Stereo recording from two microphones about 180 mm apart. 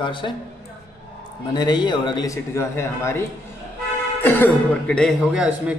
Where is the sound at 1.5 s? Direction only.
25° left (ahead or behind).